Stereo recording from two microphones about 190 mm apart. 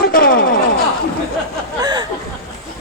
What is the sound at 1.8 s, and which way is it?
Speech, 20° right (ahead or behind).